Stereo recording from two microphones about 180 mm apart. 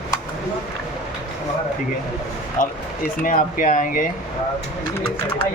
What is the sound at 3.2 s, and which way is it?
Speech, 50° left (ahead or behind).